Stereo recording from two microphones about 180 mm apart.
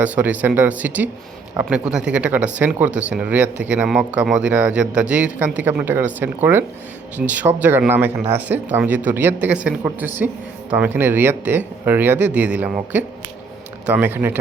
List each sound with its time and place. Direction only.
0.0 s speech: 10° right (ahead or behind)